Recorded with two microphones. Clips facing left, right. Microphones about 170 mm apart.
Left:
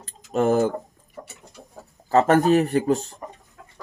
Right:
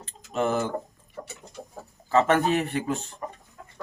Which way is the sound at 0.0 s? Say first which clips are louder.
Left 5 dB; 45° left (ahead or behind).